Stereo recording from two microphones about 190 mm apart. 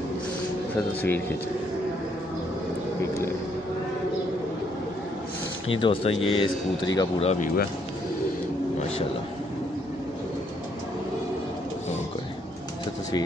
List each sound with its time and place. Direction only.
0.7 s speech: 10° left (ahead or behind)
5.8 s speech: 25° left (ahead or behind)
7.2 s speech: 45° left (ahead or behind)